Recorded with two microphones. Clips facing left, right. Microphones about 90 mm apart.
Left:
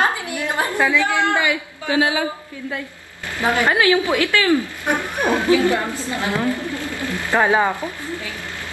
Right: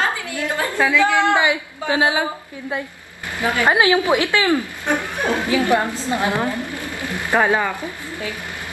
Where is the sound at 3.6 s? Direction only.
20° right (ahead or behind).